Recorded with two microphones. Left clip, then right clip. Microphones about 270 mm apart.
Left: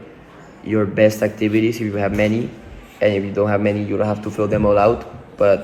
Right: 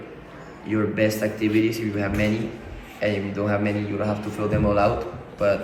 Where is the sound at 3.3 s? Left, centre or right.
Centre.